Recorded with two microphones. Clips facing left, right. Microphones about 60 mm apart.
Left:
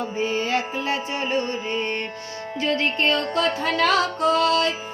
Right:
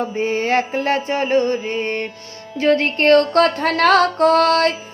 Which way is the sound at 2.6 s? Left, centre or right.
Right.